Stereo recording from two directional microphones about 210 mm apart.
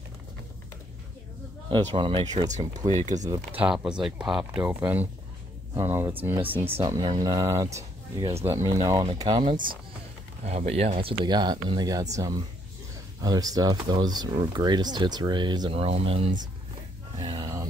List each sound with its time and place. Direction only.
1.7 s speech: 25° right (ahead or behind)
2.8 s speech: 15° right (ahead or behind)
10.4 s speech: 30° right (ahead or behind)
17.2 s a sound: 20° right (ahead or behind)